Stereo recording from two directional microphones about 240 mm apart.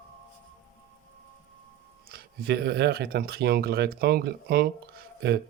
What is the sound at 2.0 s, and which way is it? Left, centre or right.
Speech, right.